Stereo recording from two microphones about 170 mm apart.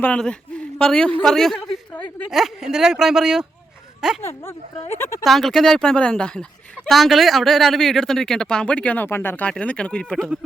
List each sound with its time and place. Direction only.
0.0 s speech: 5° left (ahead or behind)
1.2 s a sound: centre (ahead or behind)
2.3 s speech: 5° right (ahead or behind)
4.2 s speech: 15° left (ahead or behind)
5.2 s speech: centre (ahead or behind)